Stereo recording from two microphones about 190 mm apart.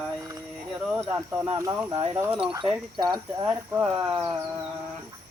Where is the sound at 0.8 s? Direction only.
10° right (ahead or behind).